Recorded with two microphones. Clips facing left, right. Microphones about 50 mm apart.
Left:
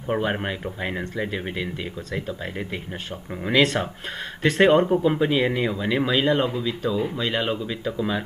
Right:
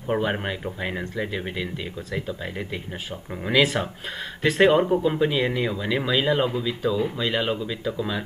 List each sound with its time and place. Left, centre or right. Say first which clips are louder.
0.1 s speech: even; centre
3.4 s speech: left 1 dB; centre